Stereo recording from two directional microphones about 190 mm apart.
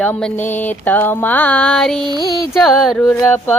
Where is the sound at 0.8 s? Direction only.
10° left (ahead or behind).